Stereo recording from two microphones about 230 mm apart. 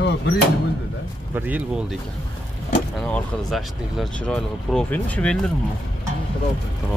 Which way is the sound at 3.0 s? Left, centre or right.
Centre.